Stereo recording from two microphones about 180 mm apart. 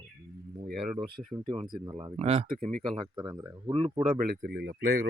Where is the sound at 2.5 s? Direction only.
55° right (ahead or behind).